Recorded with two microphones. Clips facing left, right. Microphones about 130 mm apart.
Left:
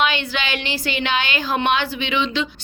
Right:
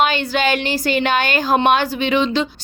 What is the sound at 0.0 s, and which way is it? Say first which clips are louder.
A woman's voice: right 5 dB; 40° right (ahead or behind).